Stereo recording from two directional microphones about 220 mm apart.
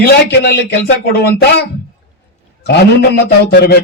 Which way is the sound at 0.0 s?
50° left (ahead or behind).